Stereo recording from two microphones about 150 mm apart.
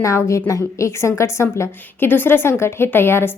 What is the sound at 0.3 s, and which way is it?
A woman's voice, 20° left (ahead or behind).